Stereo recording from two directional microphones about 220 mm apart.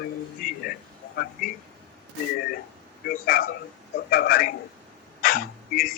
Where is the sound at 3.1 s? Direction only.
40° left (ahead or behind).